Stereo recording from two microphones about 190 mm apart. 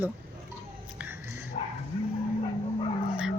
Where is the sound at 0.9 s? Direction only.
10° right (ahead or behind).